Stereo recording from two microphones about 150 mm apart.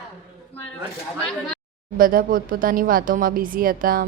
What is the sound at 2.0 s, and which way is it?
Speech, 70° right (ahead or behind).